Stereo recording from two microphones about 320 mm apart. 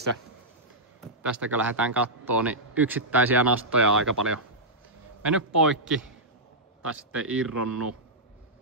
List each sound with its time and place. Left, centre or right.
1.0 s a man's voice: centre